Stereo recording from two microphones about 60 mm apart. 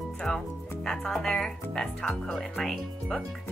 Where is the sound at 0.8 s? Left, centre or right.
Centre.